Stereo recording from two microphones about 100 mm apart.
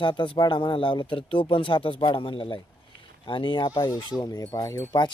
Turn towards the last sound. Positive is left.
turn(degrees=50)  # may be behind; listen again after turning